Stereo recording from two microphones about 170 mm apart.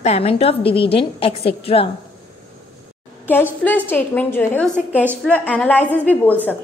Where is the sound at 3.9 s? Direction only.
10° left (ahead or behind).